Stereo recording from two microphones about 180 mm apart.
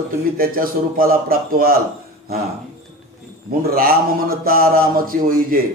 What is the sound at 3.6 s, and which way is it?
A man's voice, 55° right (ahead or behind).